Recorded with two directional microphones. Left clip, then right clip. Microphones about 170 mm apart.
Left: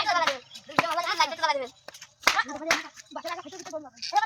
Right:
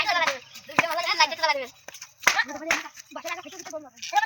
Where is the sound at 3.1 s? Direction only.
35° right (ahead or behind).